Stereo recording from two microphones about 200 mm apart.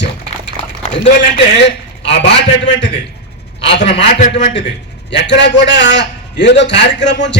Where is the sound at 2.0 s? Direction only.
60° left (ahead or behind).